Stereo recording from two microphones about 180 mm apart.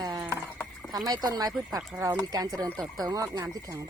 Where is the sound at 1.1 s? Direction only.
20° right (ahead or behind).